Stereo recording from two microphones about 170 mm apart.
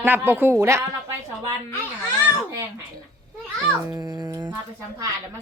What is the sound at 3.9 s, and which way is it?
Speech, 25° right (ahead or behind).